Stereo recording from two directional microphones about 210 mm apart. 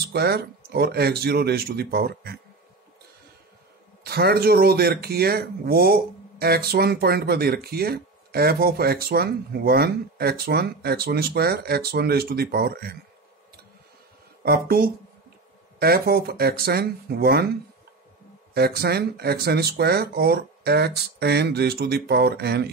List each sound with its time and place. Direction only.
0.1 s speech: 50° right (ahead or behind)
4.0 s speech: 50° right (ahead or behind)
14.4 s speech: 45° right (ahead or behind)
18.5 s speech: 50° right (ahead or behind)